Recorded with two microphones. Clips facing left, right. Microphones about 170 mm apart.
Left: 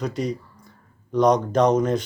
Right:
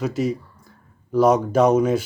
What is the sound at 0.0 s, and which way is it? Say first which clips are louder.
Speech: right 3 dB; 5° right (ahead or behind).